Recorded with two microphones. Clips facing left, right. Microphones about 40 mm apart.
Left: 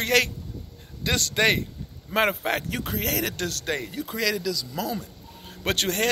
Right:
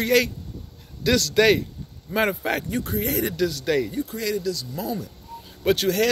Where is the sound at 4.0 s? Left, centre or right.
Left.